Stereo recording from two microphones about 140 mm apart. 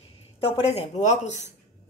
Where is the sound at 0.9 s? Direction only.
55° left (ahead or behind).